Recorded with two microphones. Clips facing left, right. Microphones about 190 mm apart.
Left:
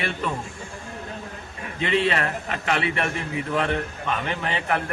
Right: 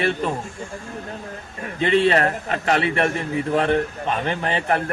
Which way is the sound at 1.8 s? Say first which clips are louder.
Right 5 dB; 40° right (ahead or behind).